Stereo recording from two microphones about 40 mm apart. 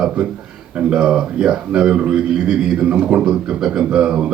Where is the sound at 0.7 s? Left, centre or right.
Right.